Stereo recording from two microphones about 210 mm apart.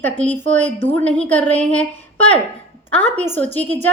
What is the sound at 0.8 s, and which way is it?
A woman's voice, 5° left (ahead or behind).